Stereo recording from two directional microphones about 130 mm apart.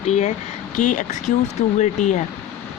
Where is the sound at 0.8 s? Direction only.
80° left.